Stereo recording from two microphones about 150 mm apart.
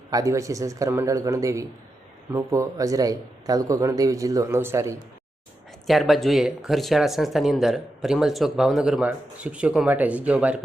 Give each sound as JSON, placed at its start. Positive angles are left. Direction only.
{"t": 0.1, "sound": "speech", "side_deg": -20}
{"t": 5.9, "sound": "speech", "side_deg": 0}